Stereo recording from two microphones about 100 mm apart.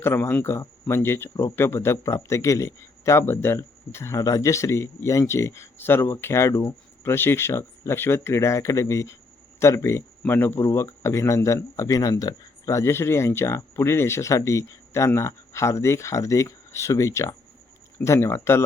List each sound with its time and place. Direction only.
0.0 s speech: 25° left (ahead or behind)